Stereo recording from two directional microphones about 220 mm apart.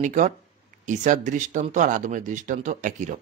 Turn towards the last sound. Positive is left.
turn(degrees=-35)  # may be behind; listen again after turning